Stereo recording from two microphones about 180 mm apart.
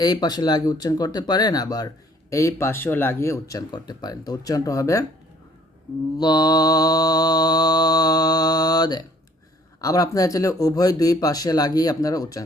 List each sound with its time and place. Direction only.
0.0 s speech: 20° left (ahead or behind)
6.1 s mantra: 20° left (ahead or behind)
9.8 s speech: 20° left (ahead or behind)